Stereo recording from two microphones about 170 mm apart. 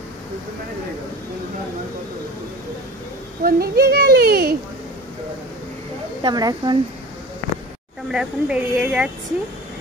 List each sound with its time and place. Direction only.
3.4 s speech: 65° right (ahead or behind)
6.2 s speech: 25° right (ahead or behind)
8.1 s a woman's voice: 5° right (ahead or behind)